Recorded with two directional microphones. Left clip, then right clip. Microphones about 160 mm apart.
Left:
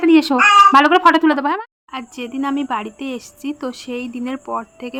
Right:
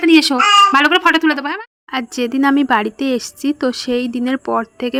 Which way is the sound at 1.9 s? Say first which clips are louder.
Right 10 dB; 45° right (ahead or behind).